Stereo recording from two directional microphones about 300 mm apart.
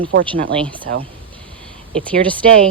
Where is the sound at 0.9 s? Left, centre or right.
Right.